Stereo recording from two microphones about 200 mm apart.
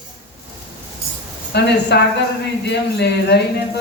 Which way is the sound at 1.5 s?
55° left (ahead or behind).